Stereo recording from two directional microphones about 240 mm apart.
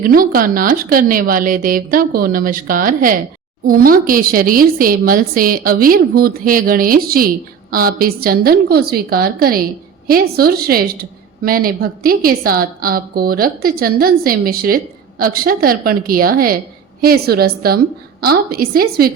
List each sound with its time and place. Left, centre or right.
0.0 s a woman's voice: right